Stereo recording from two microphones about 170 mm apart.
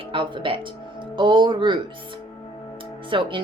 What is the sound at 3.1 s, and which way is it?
Speech, 30° right (ahead or behind).